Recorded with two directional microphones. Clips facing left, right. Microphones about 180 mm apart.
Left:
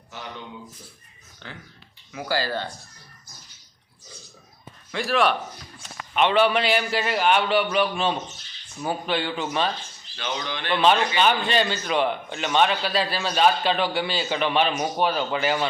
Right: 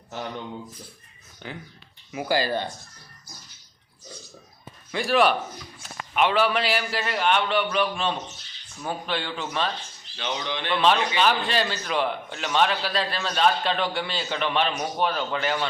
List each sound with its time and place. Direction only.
1.4 s speech: 10° right (ahead or behind)
4.9 s a man's voice: centre (ahead or behind)
10.2 s speech: 20° right (ahead or behind)
10.7 s a man's voice: centre (ahead or behind)